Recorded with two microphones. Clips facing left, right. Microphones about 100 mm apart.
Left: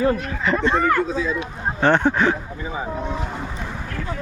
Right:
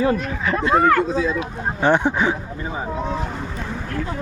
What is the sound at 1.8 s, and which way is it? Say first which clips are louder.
Speech: left 1 dB; 15° right (ahead or behind).